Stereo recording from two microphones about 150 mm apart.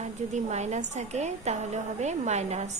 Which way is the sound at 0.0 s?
50° right (ahead or behind).